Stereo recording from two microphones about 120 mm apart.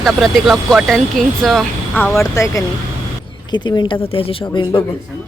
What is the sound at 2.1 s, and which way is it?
Speech, 25° left (ahead or behind).